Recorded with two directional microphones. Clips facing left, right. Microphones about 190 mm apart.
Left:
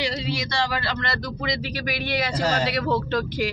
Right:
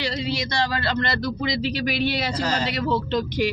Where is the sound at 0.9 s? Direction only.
30° right (ahead or behind).